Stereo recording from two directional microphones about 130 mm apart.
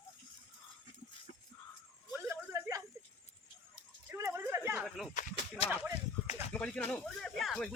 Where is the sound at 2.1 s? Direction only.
20° right (ahead or behind).